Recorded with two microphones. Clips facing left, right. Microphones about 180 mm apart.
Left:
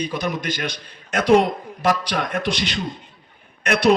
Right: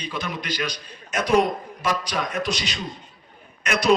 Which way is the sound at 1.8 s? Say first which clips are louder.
Left 5 dB; 55° left (ahead or behind).